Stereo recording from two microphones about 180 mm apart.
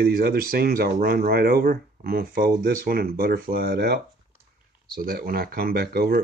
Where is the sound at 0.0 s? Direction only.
60° right (ahead or behind).